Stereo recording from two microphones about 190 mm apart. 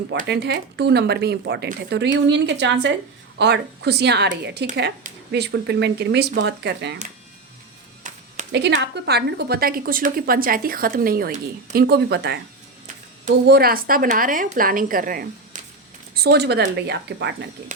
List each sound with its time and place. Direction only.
0.3 s speech: 60° right (ahead or behind)
8.1 s a sound: 45° right (ahead or behind)
8.5 s a woman's voice: 65° right (ahead or behind)
13.5 s a woman's voice: 50° right (ahead or behind)
16.1 s speech: 60° right (ahead or behind)